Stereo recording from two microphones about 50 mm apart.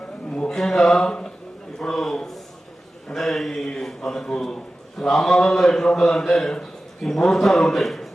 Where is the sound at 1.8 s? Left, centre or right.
Centre.